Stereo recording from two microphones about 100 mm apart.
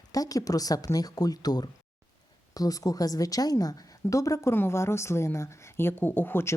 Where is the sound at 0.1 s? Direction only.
35° left (ahead or behind).